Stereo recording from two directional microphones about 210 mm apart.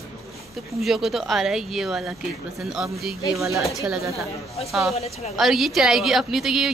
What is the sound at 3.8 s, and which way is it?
Speech, 15° right (ahead or behind).